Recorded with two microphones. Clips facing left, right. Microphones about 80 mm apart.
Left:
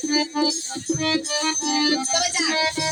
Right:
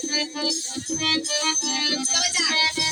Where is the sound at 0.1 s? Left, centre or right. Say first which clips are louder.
Left 6 dB; left.